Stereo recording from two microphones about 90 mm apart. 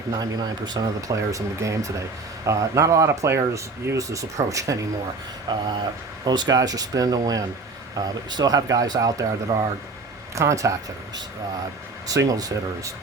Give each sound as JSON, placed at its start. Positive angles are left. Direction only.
{"t": 0.2, "sound": "speech", "side_deg": -50}
{"t": 1.1, "sound": "speech", "side_deg": -35}
{"t": 5.5, "sound": "speech", "side_deg": -55}
{"t": 10.3, "sound": "speech", "side_deg": -35}
{"t": 12.0, "sound": "speech", "side_deg": -40}